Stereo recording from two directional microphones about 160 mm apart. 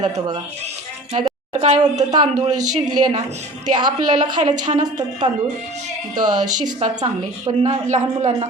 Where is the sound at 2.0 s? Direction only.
25° right (ahead or behind).